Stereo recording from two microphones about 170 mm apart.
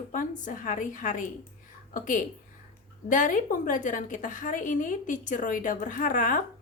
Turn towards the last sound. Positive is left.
turn(degrees=50)  # may be behind; listen again after turning